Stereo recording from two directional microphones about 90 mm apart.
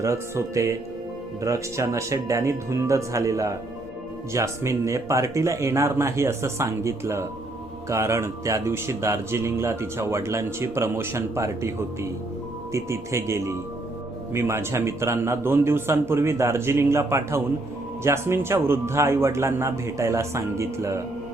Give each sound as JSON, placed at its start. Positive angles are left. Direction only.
{"t": 0.0, "sound": "speech", "side_deg": -35}
{"t": 12.7, "sound": "a man's voice", "side_deg": -30}